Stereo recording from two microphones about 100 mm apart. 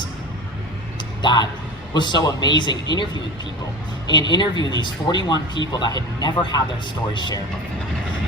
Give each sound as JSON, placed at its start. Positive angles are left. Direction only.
{"t": 1.2, "sound": "speech", "side_deg": 45}
{"t": 4.1, "sound": "speech", "side_deg": 50}